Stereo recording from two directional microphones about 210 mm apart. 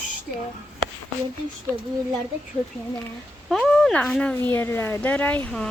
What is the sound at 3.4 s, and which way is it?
Speech, centre (ahead or behind).